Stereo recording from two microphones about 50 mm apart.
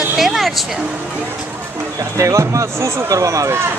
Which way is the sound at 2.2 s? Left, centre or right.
Right.